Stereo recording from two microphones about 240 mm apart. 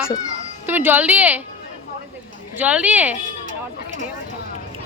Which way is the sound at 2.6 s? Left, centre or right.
Centre.